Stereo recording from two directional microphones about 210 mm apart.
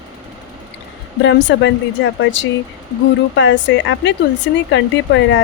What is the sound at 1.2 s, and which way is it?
Speech, 60° left (ahead or behind).